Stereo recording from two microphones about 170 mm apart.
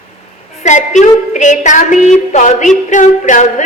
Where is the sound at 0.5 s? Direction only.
45° left (ahead or behind).